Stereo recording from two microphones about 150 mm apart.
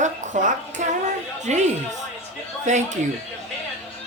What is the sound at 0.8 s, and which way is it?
Speech, 55° right (ahead or behind).